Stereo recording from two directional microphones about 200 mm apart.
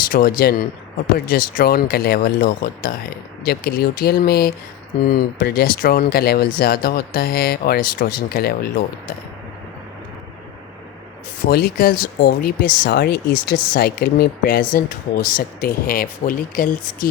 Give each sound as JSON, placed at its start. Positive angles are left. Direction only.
{"t": 0.1, "sound": "speech", "side_deg": 45}
{"t": 11.4, "sound": "speech", "side_deg": 50}